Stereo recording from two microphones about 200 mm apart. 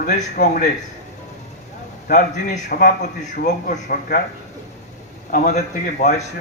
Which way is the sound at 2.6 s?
40° left (ahead or behind).